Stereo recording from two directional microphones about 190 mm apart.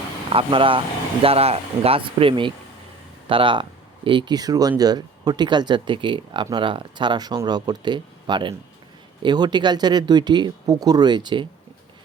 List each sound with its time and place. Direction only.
0.3 s speech: 25° right (ahead or behind)